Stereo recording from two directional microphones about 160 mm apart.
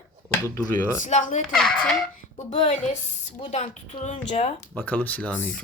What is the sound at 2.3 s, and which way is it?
Speech, 45° left (ahead or behind).